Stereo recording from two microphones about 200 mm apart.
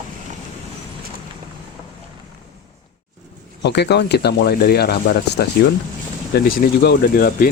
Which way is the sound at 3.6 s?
55° left (ahead or behind).